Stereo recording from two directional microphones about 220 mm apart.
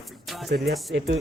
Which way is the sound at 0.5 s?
45° right (ahead or behind).